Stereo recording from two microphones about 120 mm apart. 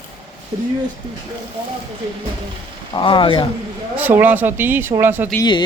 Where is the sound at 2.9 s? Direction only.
45° left (ahead or behind).